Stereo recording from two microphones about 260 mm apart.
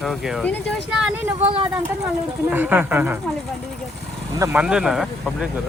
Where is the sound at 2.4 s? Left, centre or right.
Centre.